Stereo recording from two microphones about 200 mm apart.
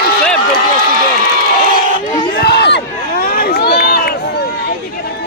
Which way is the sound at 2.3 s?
55° left (ahead or behind).